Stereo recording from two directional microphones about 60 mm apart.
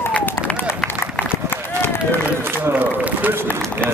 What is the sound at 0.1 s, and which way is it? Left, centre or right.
Run, left.